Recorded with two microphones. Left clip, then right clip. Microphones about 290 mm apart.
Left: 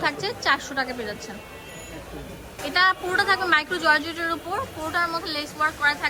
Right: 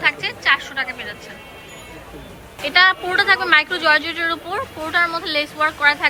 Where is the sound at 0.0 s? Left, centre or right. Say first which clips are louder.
Right 6 dB; centre.